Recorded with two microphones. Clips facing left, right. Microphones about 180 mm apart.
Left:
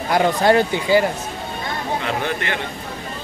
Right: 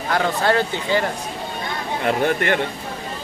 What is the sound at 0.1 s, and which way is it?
Speech, 15° left (ahead or behind).